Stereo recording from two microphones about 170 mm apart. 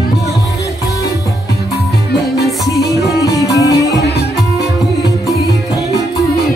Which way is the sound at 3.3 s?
20° left (ahead or behind).